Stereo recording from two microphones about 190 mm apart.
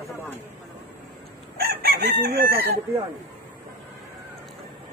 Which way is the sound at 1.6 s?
55° right (ahead or behind).